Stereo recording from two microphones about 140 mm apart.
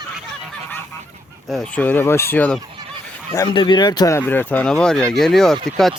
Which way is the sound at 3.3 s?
30° left (ahead or behind).